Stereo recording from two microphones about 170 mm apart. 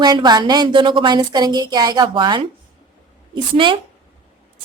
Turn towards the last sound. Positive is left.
turn(degrees=-30)  # may be behind; listen again after turning